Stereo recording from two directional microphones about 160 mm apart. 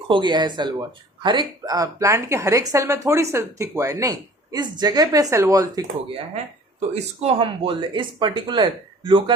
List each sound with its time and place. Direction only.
0.1 s speech: 30° right (ahead or behind)
6.3 s speech: 45° right (ahead or behind)